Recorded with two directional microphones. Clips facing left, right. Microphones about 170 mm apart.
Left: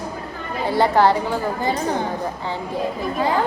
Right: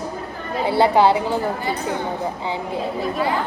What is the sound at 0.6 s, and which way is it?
Speech, 15° right (ahead or behind).